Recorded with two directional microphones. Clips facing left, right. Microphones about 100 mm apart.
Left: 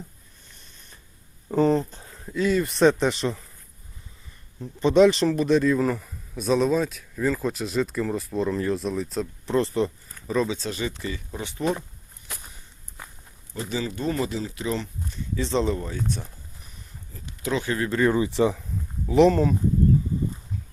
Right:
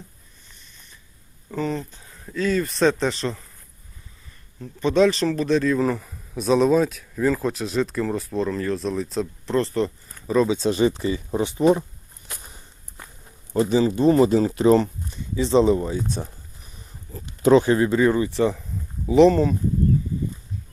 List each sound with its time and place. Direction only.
1.5 s speech: 35° left (ahead or behind)
2.2 s speech: 15° left (ahead or behind)
4.6 s speech: 20° left (ahead or behind)
10.2 s speech: 10° right (ahead or behind)
10.7 s speech: 25° right (ahead or behind)
13.7 s speech: 25° right (ahead or behind)
14.2 s speech: 40° right (ahead or behind)
15.4 s speech: 10° right (ahead or behind)
17.1 s speech: 40° right (ahead or behind)
17.9 s speech: 5° right (ahead or behind)
18.2 s speech: 15° left (ahead or behind)
19.0 s speech: centre (ahead or behind)